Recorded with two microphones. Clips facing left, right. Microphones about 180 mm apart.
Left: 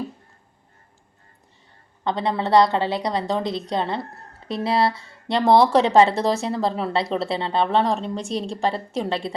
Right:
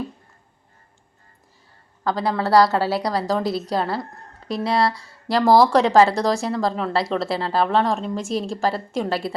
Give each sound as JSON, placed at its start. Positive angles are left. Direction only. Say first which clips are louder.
{"t": 2.1, "sound": "a woman's voice", "louder": "right 1 dB", "side_deg": 0}
{"t": 4.1, "sound": "a sound", "louder": "right 1 dB", "side_deg": 0}
{"t": 4.7, "sound": "speech", "louder": "even", "side_deg": 25}
{"t": 4.9, "sound": "a woman's voice", "louder": "right 2 dB", "side_deg": 0}